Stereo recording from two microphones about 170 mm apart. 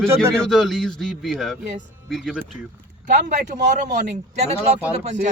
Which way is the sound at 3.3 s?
45° right (ahead or behind).